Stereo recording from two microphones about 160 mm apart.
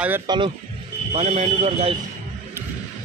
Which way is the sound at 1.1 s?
45° right (ahead or behind).